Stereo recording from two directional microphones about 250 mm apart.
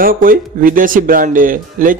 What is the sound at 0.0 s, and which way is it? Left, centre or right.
Speech, right.